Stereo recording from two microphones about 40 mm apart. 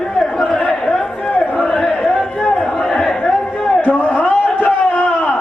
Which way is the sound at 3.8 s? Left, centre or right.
Left.